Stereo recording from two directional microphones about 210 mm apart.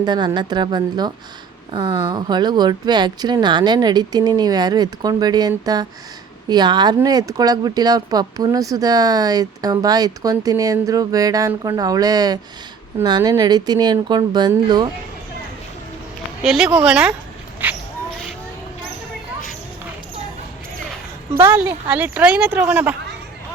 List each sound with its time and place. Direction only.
0.0 s speech: 20° right (ahead or behind)
16.4 s speech: centre (ahead or behind)
21.3 s speech: 10° right (ahead or behind)